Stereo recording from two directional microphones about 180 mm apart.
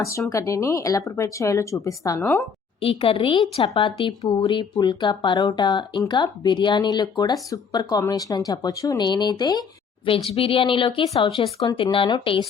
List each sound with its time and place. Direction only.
0.3 s speech: 15° left (ahead or behind)
2.8 s a woman's voice: 30° left (ahead or behind)